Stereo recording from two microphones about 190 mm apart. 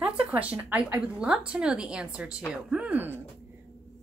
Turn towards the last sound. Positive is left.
turn(degrees=-10)  # may be behind; listen again after turning